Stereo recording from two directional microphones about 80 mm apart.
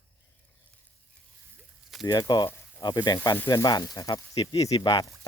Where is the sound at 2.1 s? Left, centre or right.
Left.